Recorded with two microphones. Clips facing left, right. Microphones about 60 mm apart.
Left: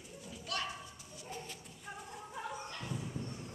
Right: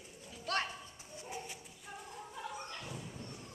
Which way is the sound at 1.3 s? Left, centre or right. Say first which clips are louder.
Right 1 dB; centre.